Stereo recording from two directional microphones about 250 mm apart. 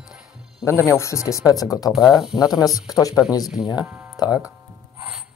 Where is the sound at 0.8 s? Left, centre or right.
Centre.